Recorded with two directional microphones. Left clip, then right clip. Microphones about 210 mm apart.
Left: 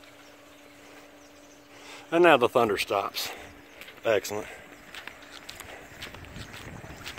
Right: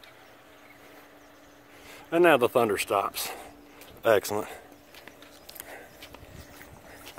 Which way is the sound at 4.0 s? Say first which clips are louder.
Right 3 dB; 30° right (ahead or behind).